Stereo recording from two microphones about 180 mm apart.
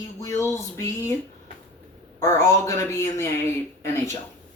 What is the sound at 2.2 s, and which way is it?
Speech, 15° left (ahead or behind).